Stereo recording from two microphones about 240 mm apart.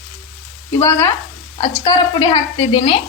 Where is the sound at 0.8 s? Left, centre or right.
Centre.